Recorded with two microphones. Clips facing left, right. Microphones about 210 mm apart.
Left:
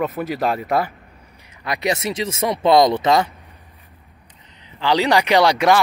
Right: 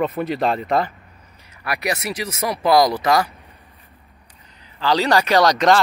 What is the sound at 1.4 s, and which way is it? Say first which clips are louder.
Speech: left 2 dB; 20° left (ahead or behind).